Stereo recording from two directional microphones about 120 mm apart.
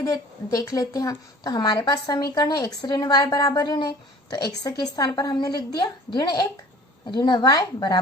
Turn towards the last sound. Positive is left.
turn(degrees=35)  # may be behind; listen again after turning